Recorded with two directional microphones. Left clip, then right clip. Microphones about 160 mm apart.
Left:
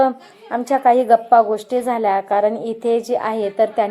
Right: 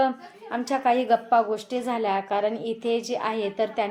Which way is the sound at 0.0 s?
20° left (ahead or behind).